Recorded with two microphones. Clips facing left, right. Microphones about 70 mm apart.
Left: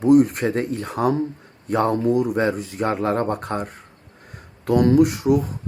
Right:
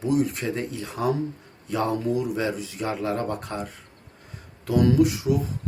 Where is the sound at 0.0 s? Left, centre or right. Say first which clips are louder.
Left 9 dB; left.